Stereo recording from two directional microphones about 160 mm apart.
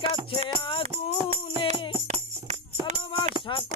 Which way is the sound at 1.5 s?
35° right (ahead or behind).